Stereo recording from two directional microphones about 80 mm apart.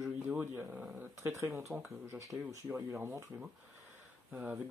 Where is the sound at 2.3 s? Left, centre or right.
Centre.